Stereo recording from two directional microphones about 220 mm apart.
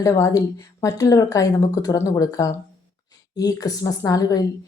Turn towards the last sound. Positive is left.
turn(degrees=15)  # may be behind; listen again after turning